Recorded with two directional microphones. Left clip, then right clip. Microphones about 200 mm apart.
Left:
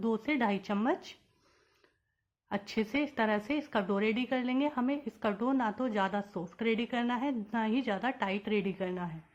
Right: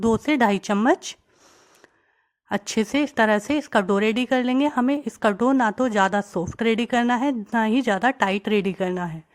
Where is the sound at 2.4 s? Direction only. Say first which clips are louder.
Right 10 dB; 50° right (ahead or behind).